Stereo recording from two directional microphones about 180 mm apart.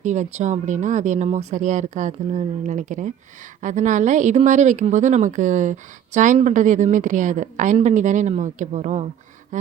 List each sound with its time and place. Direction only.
0.0 s a woman's voice: 40° right (ahead or behind)